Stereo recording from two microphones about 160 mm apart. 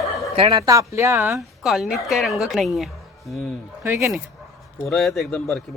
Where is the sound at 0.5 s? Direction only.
20° right (ahead or behind).